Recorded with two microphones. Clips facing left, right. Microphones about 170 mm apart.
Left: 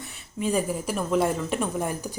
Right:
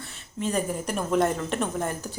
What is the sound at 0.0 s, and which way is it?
Speech, 10° left (ahead or behind).